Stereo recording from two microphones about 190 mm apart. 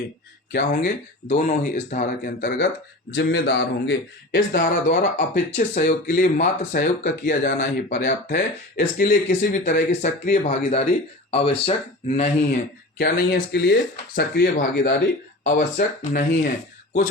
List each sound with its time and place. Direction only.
1.3 s speech: 40° left (ahead or behind)
3.2 s a man's voice: 60° left (ahead or behind)
4.5 s speech: 45° left (ahead or behind)
8.3 s speech: 55° left (ahead or behind)
13.0 s a man's voice: 55° left (ahead or behind)